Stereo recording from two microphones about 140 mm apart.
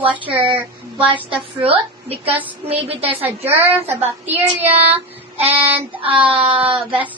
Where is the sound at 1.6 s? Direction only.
45° right (ahead or behind).